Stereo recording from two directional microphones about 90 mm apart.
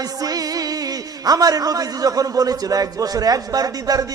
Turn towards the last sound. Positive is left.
turn(degrees=-45)  # may be behind; listen again after turning